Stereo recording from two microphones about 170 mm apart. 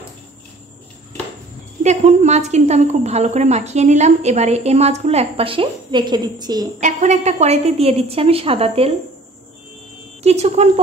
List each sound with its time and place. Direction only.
1.8 s a woman's voice: 45° right (ahead or behind); by 6.7 s 25° right (ahead or behind)
6.8 s a woman's voice: 45° right (ahead or behind)
10.2 s a woman's voice: 40° right (ahead or behind)